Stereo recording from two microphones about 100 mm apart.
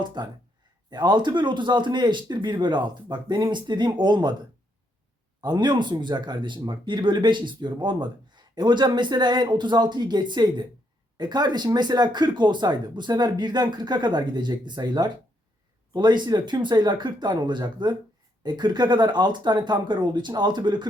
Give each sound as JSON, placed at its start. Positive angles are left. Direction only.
{"t": 0.0, "sound": "speech", "side_deg": -45}
{"t": 5.4, "sound": "speech", "side_deg": -45}